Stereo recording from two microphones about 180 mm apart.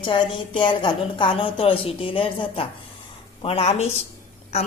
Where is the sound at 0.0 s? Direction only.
25° left (ahead or behind).